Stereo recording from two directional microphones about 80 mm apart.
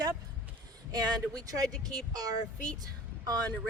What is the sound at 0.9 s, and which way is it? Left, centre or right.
Speech, right.